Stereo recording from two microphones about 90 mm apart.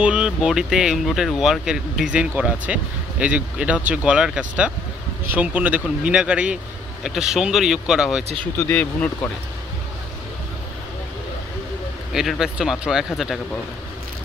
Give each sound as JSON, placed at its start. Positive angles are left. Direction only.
{"t": 0.0, "sound": "speech", "side_deg": -10}
{"t": 8.5, "sound": "speech", "side_deg": 20}
{"t": 12.1, "sound": "speech", "side_deg": -5}